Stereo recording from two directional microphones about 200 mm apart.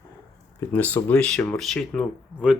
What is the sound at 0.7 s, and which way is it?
Speech, 10° left (ahead or behind).